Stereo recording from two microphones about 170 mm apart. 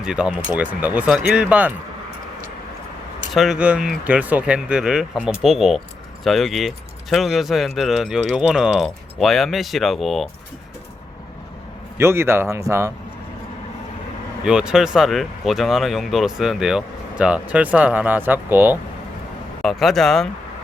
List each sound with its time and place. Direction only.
0.0 s speech: 5° right (ahead or behind)
3.3 s speech: centre (ahead or behind)
11.9 s speech: 15° right (ahead or behind)
14.4 s speech: 5° right (ahead or behind)
19.6 s speech: centre (ahead or behind)